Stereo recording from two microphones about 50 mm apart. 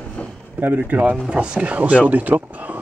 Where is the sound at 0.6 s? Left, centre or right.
Right.